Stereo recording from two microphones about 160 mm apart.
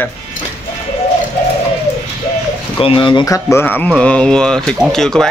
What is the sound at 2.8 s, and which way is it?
Speech, 35° left (ahead or behind).